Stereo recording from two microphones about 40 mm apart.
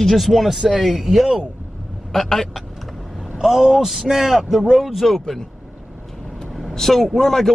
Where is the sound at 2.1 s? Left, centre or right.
Centre.